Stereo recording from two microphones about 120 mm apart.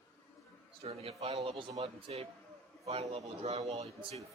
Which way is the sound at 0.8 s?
55° right (ahead or behind).